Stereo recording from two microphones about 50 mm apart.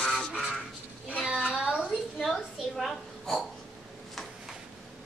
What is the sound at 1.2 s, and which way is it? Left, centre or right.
Child singing, centre.